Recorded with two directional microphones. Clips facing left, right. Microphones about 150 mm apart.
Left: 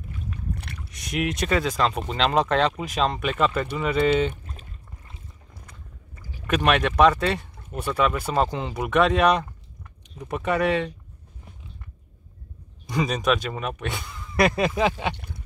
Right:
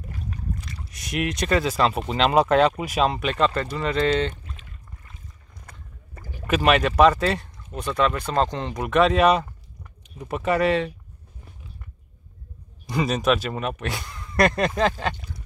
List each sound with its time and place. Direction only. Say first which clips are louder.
0.8 s speech: even; centre (ahead or behind)
5.7 s boat: right 1 dB; 50° right (ahead or behind)
6.4 s speech: right 2 dB; 5° right (ahead or behind)
12.8 s speech: right 2 dB; centre (ahead or behind)
15.1 s duck: even; 55° left (ahead or behind)